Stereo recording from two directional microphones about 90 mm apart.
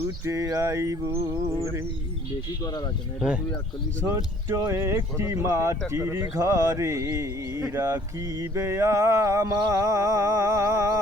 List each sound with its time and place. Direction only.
0.3 s speech: 35° right (ahead or behind)
3.2 s speech: 10° right (ahead or behind)
4.0 s speech: 35° right (ahead or behind)